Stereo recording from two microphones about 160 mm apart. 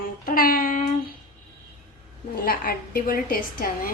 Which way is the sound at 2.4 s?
65° left (ahead or behind).